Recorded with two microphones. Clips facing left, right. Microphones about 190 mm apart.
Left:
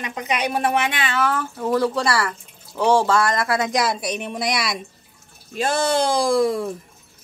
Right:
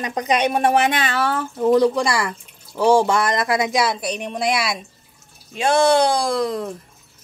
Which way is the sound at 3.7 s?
Centre (ahead or behind).